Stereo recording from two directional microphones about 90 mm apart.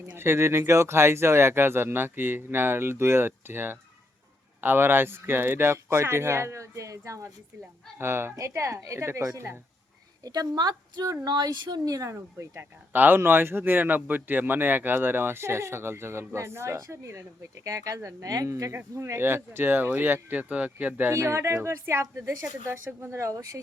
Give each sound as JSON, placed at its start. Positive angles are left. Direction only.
{"t": 0.2, "sound": "speech", "side_deg": -30}
{"t": 10.2, "sound": "speech", "side_deg": -45}
{"t": 11.9, "sound": "speech", "side_deg": -40}
{"t": 12.1, "sound": "speech", "side_deg": -25}
{"t": 21.1, "sound": "speech", "side_deg": -30}